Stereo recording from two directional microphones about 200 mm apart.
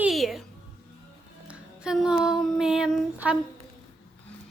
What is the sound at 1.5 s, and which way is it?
Music, 5° right (ahead or behind).